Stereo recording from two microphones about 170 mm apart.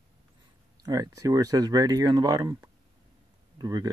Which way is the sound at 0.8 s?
20° right (ahead or behind).